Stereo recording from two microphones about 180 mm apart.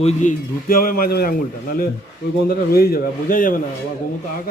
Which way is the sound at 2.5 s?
55° left (ahead or behind).